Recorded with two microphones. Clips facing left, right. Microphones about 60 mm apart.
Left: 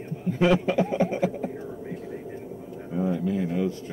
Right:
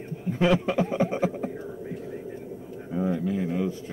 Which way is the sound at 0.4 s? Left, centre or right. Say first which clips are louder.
Left 1 dB; centre.